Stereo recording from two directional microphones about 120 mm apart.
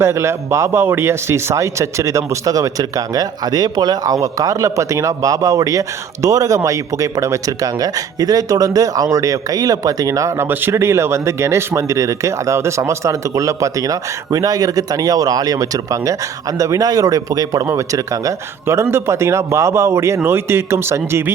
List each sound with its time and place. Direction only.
0.0 s speech: 20° right (ahead or behind)